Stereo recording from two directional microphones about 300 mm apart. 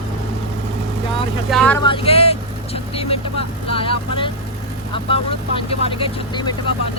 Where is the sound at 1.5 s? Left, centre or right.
Centre.